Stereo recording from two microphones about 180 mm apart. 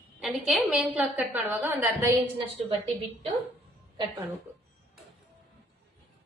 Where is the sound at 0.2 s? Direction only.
Centre (ahead or behind).